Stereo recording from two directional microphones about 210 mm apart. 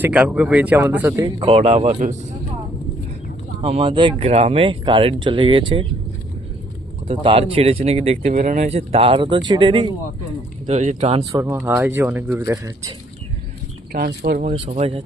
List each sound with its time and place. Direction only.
0.0 s speech: 5° right (ahead or behind)
1.4 s speech: 30° right (ahead or behind)
3.6 s speech: 30° right (ahead or behind)
7.1 s speech: 25° right (ahead or behind)
11.3 s speech: 10° right (ahead or behind)
13.9 s speech: 45° right (ahead or behind)
14.4 s speech: 30° right (ahead or behind)